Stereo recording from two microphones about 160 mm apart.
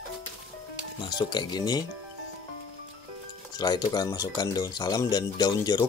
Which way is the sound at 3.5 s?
25° left (ahead or behind).